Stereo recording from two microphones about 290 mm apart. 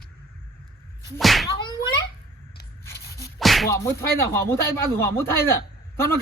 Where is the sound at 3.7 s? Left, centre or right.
Centre.